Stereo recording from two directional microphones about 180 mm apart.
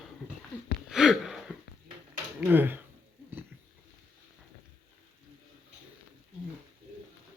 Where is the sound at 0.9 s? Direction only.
5° right (ahead or behind).